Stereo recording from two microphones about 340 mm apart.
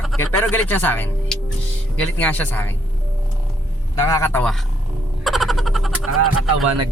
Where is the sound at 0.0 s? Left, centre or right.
Centre.